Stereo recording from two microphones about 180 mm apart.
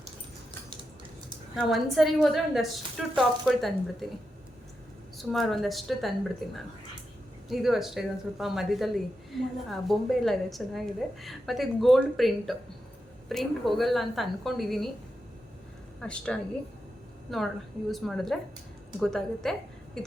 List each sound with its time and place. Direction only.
1.5 s speech: centre (ahead or behind)
5.1 s speech: centre (ahead or behind)
7.4 s speech: centre (ahead or behind)
16.0 s speech: 5° left (ahead or behind)
17.9 s a woman's voice: centre (ahead or behind)